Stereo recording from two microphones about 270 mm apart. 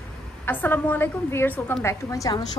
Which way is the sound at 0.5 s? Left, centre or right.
Centre.